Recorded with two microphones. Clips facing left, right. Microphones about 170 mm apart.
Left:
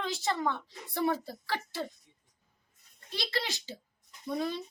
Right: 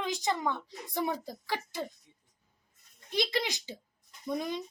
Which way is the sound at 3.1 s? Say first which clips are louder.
Right 4 dB; 15° right (ahead or behind).